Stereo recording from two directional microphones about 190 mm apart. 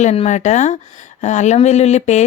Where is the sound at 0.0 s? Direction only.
35° left (ahead or behind).